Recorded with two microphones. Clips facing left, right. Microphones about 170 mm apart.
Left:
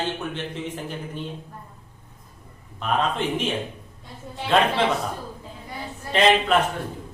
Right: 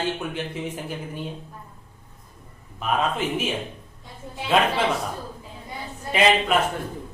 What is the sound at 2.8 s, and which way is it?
Speech, 5° right (ahead or behind).